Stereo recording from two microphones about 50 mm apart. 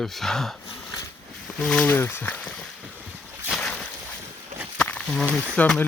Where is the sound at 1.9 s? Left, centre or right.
Left.